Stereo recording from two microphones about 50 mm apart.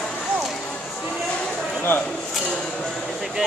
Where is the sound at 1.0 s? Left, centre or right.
Centre.